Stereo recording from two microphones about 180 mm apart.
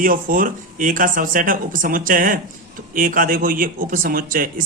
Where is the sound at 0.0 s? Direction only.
50° right (ahead or behind).